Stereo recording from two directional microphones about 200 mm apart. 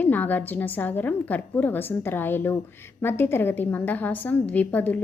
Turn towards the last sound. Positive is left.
turn(degrees=10)  # may be behind; listen again after turning